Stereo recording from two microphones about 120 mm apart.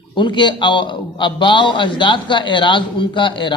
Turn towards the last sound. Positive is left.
turn(degrees=40)  # may be behind; listen again after turning